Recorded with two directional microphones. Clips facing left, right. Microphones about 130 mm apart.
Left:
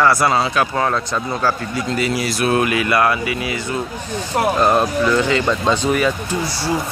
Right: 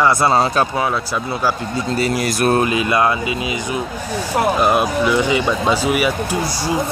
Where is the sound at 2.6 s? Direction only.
25° right (ahead or behind).